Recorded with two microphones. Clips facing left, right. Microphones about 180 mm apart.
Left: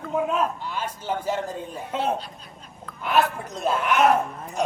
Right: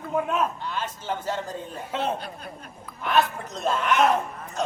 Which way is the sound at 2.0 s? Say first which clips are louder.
Left 2 dB; 55° right (ahead or behind).